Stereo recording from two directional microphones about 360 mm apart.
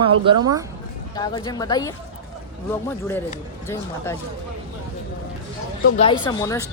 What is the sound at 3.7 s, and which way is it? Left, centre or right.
Speech, centre.